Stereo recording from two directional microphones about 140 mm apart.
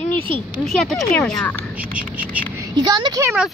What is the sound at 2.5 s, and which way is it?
Speech, 30° right (ahead or behind).